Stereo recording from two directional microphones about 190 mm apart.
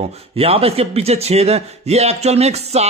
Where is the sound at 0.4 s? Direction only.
30° right (ahead or behind).